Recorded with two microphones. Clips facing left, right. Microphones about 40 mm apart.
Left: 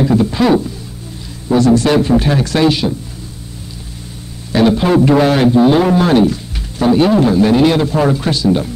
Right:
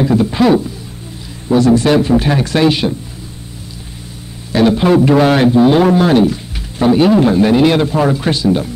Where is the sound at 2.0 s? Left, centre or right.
Centre.